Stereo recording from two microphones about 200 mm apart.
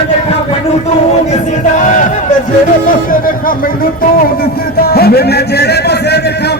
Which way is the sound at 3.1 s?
45° left (ahead or behind).